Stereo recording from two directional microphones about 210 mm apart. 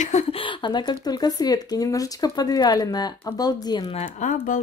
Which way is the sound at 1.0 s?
20° left (ahead or behind).